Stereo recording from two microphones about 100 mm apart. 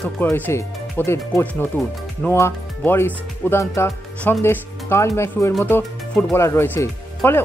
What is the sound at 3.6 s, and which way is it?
Speech, 30° left (ahead or behind).